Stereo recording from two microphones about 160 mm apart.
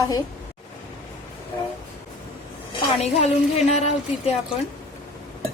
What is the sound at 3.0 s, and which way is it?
Music, 45° left (ahead or behind).